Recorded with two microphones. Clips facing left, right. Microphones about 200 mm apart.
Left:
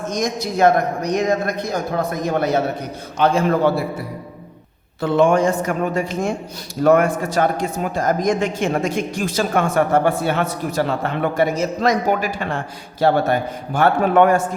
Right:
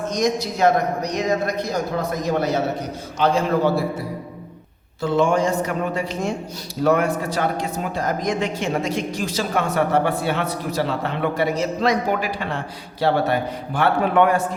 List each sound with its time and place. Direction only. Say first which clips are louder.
0.1 s a man's voice: right 1 dB; 50° left (ahead or behind)
4.9 s a man's voice: left 3 dB; 60° left (ahead or behind)